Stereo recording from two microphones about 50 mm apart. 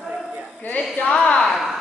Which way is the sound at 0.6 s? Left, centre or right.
Left.